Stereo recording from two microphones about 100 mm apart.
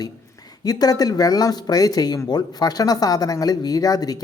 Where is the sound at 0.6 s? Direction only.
40° left (ahead or behind).